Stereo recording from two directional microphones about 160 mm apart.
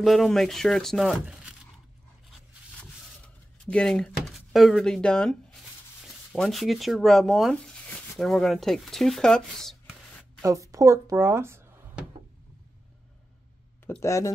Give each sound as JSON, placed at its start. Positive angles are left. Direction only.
{"t": 0.0, "sound": "speech", "side_deg": 0}
{"t": 3.6, "sound": "speech", "side_deg": 5}
{"t": 10.4, "sound": "speech", "side_deg": -20}
{"t": 13.8, "sound": "speech", "side_deg": 15}